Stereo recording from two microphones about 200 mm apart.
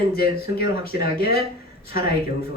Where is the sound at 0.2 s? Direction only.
50° left (ahead or behind).